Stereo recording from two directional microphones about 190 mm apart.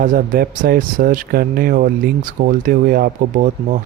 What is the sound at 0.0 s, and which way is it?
Speech, 45° right (ahead or behind).